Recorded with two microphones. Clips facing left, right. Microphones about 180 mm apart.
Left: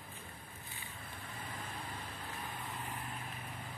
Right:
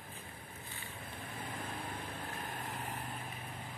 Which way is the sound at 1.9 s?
50° right (ahead or behind).